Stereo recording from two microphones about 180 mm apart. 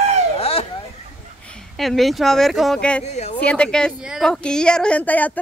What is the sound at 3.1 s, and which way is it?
Speech, 35° left (ahead or behind).